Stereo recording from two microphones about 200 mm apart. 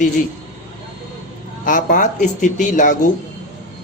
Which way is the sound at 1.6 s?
40° left (ahead or behind).